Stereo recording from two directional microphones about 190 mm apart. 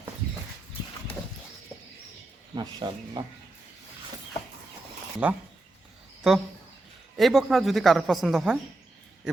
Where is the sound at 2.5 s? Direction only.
20° right (ahead or behind).